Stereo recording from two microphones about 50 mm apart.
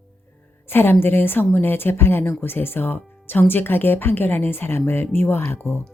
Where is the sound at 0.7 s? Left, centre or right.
Left.